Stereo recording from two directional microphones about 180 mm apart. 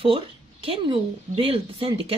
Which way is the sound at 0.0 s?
30° right (ahead or behind).